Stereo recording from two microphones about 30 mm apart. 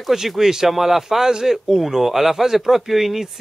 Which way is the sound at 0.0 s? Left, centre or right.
Centre.